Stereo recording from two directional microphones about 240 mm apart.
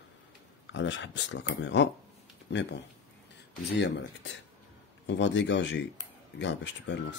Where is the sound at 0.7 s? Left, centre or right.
Left.